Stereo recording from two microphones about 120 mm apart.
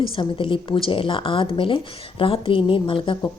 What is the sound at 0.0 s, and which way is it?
Speech, 45° left (ahead or behind).